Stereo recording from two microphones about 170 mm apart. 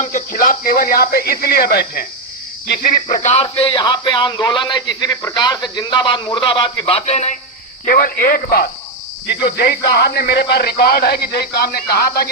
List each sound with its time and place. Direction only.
0.0 s speech: 50° left (ahead or behind); by 3.2 s 65° left (ahead or behind)
3.2 s speech: 40° left (ahead or behind)
7.9 s speech: 55° left (ahead or behind)
9.2 s speech: 75° left (ahead or behind)